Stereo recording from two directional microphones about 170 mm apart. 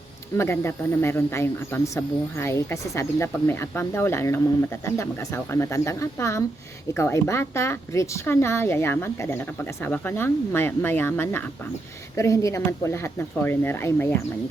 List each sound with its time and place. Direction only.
0.3 s speech: 15° left (ahead or behind)